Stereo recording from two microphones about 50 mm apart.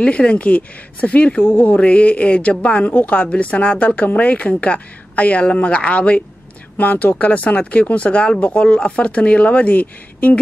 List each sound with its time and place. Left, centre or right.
0.0 s speech: left
1.4 s speech: left
1.8 s speech: left